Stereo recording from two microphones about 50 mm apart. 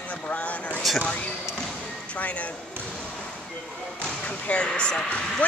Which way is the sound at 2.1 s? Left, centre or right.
Left.